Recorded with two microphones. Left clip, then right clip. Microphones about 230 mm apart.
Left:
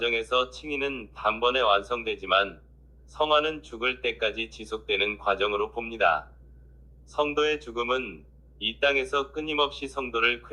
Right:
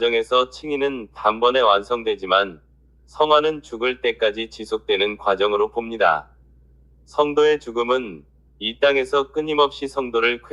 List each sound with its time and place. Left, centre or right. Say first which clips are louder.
0.0 s speech: right 7 dB; right